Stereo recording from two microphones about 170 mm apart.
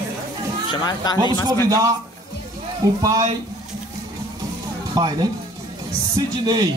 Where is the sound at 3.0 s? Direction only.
20° right (ahead or behind).